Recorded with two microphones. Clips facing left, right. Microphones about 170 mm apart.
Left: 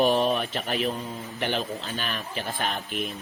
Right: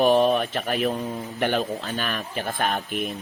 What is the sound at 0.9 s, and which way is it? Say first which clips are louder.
Speech: right 5 dB; 65° right (ahead or behind).